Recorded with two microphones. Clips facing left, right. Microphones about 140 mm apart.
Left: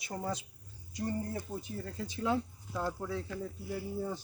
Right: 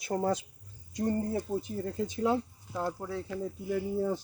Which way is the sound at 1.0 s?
35° right (ahead or behind).